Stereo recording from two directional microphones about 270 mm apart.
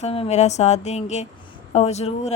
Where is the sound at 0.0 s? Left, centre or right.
Left.